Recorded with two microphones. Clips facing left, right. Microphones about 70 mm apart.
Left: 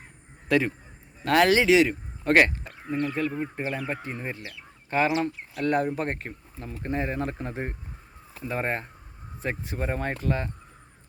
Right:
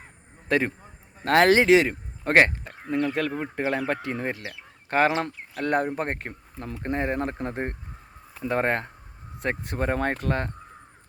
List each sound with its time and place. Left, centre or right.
0.4 s speech: right
2.9 s speech: right
3.6 s speech: right
4.9 s speech: right
8.4 s speech: right